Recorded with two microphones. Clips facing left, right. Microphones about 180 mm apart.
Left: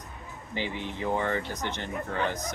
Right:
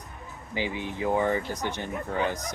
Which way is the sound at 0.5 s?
15° right (ahead or behind).